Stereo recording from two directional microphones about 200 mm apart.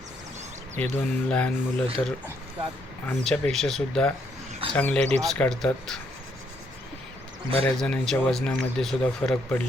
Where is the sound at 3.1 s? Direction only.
5° left (ahead or behind).